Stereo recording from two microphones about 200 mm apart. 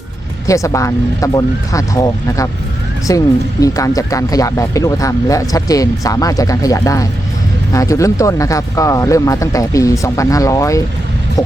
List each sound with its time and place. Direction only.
0.4 s speech: 15° left (ahead or behind)